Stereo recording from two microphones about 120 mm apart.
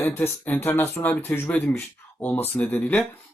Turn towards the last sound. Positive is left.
turn(degrees=15)  # may be behind; listen again after turning